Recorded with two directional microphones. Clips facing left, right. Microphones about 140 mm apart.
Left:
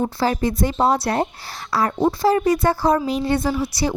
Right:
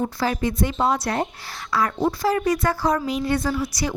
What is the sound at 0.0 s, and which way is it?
A woman's voice, 30° left (ahead or behind).